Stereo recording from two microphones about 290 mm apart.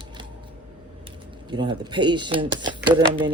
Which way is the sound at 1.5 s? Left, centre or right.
Centre.